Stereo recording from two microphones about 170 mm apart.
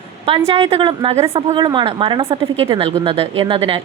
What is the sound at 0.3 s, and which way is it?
A woman's voice, 35° right (ahead or behind).